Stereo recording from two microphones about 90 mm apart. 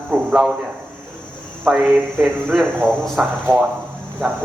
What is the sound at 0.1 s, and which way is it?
Speech, 15° right (ahead or behind).